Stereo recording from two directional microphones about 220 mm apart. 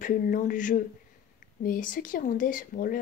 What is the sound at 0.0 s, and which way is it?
Speech, 40° left (ahead or behind).